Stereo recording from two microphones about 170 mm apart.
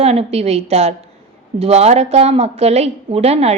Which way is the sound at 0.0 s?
35° right (ahead or behind).